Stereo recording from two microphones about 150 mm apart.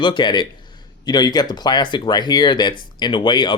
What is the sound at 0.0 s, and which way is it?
Speech, 30° left (ahead or behind).